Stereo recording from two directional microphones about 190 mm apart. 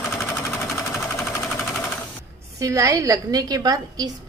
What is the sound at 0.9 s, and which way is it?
Sewing machine, 10° left (ahead or behind).